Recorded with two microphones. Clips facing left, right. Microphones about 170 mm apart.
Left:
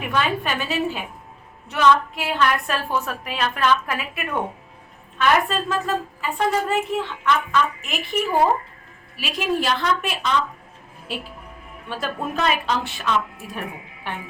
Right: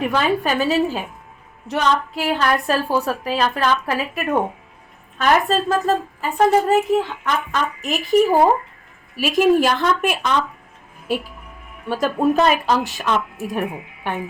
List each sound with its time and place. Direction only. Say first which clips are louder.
0.1 s a woman's voice: right 4 dB; 35° right (ahead or behind)